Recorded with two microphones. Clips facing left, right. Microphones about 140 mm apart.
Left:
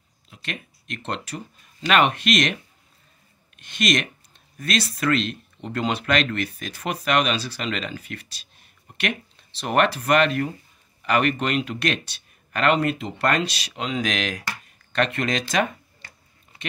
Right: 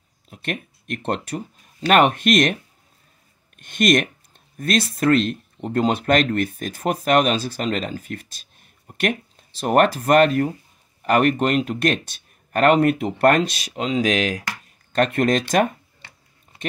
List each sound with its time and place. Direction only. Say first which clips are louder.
0.3 s speech: right 6 dB; 50° right (ahead or behind)